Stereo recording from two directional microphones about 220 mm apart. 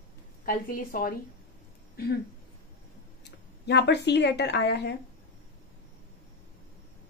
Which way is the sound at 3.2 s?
50° left (ahead or behind).